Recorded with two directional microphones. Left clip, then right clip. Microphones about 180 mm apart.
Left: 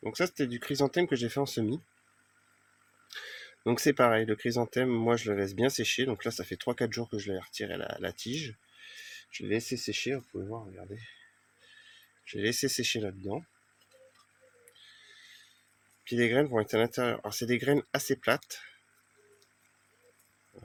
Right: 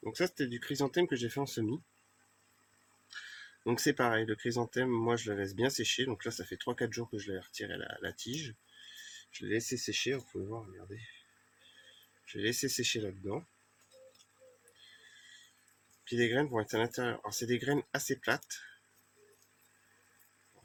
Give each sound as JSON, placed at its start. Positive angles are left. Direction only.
{"t": 0.0, "sound": "speech", "side_deg": 50}
{"t": 3.6, "sound": "speech", "side_deg": 50}
{"t": 12.2, "sound": "speech", "side_deg": 50}
{"t": 16.0, "sound": "speech", "side_deg": 50}